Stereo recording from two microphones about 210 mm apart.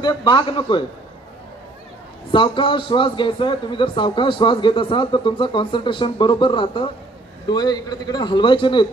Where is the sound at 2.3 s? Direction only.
25° left (ahead or behind).